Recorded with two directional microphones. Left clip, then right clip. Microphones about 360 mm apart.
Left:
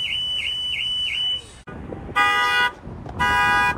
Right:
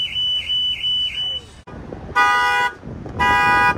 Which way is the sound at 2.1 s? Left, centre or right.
Centre.